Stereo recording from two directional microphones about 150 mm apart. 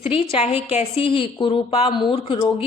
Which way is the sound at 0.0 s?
40° left (ahead or behind).